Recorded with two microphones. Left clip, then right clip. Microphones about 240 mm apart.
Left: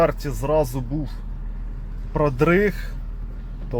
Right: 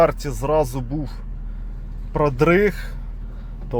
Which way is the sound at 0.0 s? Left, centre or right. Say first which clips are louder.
Right 3 dB; centre.